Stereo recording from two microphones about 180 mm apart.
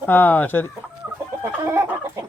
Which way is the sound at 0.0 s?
10° left (ahead or behind).